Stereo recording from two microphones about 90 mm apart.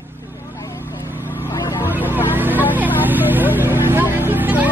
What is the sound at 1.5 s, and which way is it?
Vehicle, 40° left (ahead or behind).